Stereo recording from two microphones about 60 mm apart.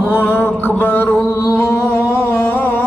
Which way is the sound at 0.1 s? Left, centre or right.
Left.